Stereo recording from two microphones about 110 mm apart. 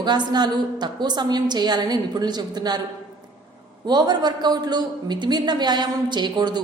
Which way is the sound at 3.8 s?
40° right (ahead or behind).